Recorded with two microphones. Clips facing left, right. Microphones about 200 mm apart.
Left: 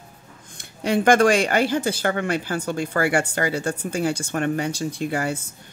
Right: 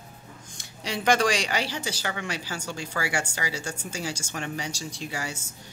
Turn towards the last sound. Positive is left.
turn(degrees=55)  # may be behind; listen again after turning